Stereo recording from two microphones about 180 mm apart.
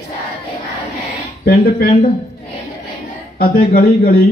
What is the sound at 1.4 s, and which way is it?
Speech, 55° left (ahead or behind).